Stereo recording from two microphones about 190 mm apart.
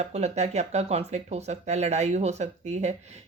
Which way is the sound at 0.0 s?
35° right (ahead or behind).